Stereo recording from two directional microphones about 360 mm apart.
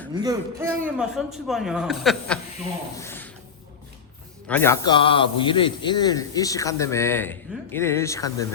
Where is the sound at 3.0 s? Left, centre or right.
Centre.